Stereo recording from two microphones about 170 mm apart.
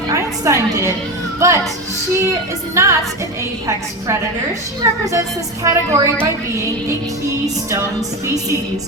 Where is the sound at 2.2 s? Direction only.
15° right (ahead or behind).